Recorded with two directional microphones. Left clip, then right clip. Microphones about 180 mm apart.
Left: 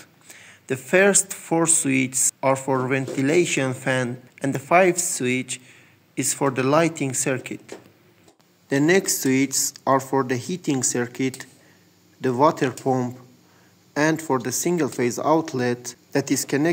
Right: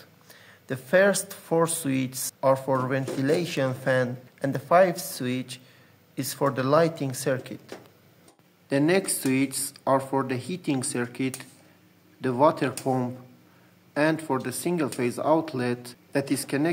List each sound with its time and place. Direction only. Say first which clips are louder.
0.3 s speech: left 6 dB; centre (ahead or behind)
8.6 s speech: left 4 dB; 20° left (ahead or behind)